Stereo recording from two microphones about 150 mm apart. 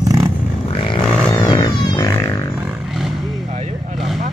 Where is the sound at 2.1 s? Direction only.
20° left (ahead or behind).